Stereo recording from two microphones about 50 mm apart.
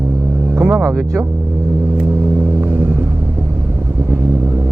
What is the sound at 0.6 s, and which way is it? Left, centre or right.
Speech, right.